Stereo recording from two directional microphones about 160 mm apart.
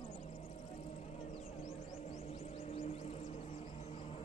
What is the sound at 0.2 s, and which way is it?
Vehicle, 45° left (ahead or behind).